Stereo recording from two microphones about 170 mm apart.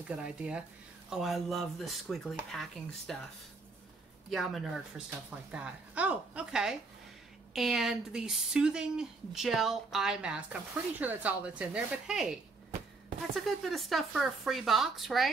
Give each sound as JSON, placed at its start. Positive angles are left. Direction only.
{"t": 0.1, "sound": "speech", "side_deg": -5}
{"t": 4.3, "sound": "speech", "side_deg": 0}